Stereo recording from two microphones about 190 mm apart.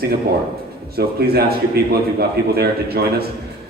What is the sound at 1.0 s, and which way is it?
A man's voice, 55° right (ahead or behind).